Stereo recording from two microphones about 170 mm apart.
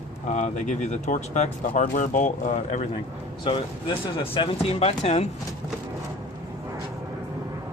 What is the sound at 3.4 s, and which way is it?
Speech, 30° left (ahead or behind).